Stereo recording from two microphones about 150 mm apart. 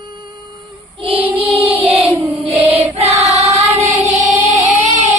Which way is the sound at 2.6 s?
40° right (ahead or behind).